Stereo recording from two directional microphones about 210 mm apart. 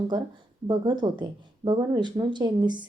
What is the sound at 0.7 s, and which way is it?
Speech, 20° right (ahead or behind).